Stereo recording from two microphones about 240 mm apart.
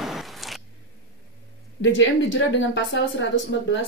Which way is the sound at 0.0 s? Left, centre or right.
Centre.